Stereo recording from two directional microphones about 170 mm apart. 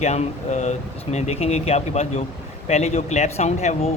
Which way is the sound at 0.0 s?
40° left (ahead or behind).